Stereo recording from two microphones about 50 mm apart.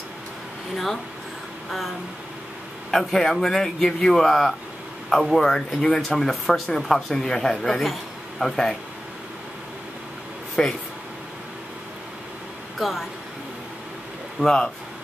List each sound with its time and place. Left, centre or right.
1.7 s speech: centre
10.6 s speech: centre
12.7 s speech: centre
14.4 s speech: centre